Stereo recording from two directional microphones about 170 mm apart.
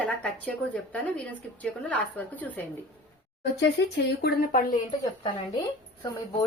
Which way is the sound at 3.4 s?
90° left.